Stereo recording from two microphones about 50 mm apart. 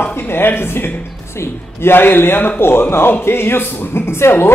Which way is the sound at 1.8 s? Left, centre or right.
Left.